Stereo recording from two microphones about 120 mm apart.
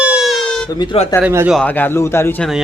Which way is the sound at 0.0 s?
5° right (ahead or behind).